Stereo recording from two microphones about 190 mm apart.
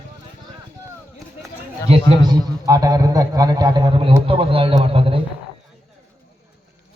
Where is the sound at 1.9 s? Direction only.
25° right (ahead or behind).